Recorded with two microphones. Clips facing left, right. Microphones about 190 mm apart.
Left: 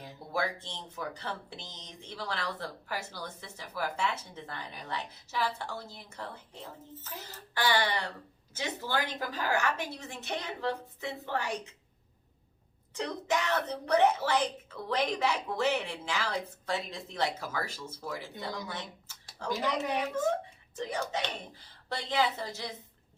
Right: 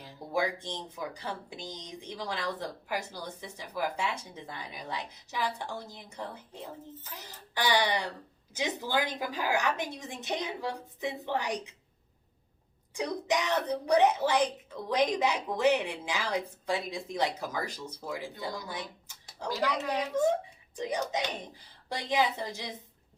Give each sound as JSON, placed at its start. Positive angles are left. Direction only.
{"t": 0.3, "sound": "speech", "side_deg": -15}
{"t": 12.9, "sound": "speech", "side_deg": -10}
{"t": 18.7, "sound": "a sound", "side_deg": -15}
{"t": 19.5, "sound": "a woman's voice", "side_deg": 20}
{"t": 20.7, "sound": "speech", "side_deg": -15}